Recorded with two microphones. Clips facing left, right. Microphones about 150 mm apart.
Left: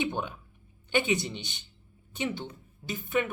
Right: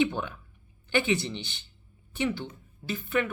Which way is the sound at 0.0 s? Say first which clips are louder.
Right 4 dB; 15° left (ahead or behind).